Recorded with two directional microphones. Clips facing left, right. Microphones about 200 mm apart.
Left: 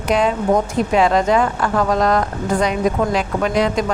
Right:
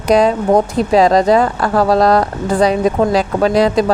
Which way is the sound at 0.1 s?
35° right (ahead or behind).